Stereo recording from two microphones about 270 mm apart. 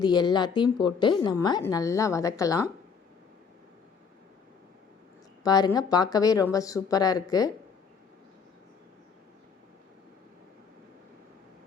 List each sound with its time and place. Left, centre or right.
0.0 s a woman's voice: centre
5.4 s a woman's voice: centre